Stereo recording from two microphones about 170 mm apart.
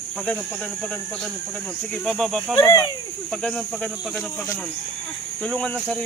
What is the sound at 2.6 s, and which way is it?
Speech, 20° left (ahead or behind).